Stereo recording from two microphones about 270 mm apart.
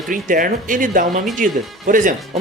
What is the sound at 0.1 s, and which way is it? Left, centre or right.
Speech, right.